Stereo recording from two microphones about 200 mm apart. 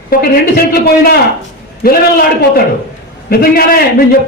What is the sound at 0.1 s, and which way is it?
A man's voice, 45° left (ahead or behind).